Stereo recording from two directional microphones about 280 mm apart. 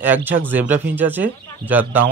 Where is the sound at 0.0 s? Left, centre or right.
Centre.